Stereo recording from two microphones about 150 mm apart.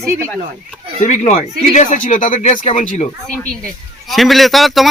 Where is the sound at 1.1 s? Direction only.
50° left (ahead or behind).